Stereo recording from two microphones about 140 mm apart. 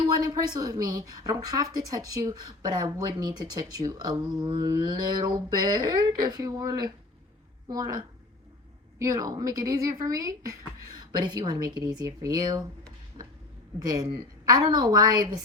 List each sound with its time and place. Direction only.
0.2 s speech: 30° right (ahead or behind)
13.2 s a sound: 35° right (ahead or behind)
13.7 s speech: 25° right (ahead or behind)